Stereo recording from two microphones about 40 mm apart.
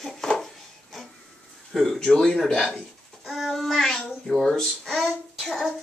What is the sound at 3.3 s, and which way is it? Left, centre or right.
Child singing, centre.